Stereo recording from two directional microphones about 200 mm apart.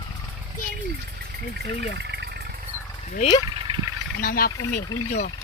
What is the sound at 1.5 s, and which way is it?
Speech, 55° right (ahead or behind).